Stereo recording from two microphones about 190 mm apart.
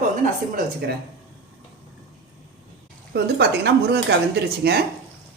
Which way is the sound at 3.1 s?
60° right (ahead or behind).